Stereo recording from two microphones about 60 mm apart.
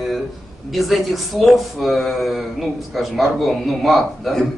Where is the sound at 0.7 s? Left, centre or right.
Centre.